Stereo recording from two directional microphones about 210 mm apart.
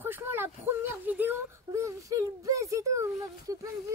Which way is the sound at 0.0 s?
10° right (ahead or behind).